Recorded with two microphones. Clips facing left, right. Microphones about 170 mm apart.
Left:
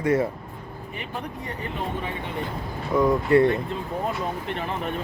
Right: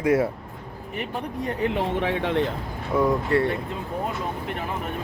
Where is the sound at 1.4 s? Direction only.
90° right.